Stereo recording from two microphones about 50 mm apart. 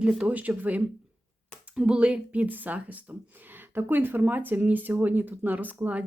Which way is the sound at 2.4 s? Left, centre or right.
Right.